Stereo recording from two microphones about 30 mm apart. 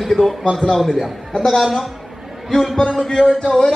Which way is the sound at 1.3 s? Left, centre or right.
Left.